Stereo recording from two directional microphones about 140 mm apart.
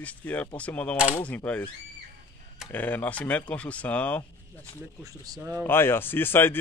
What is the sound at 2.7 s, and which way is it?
Speech, 10° left (ahead or behind).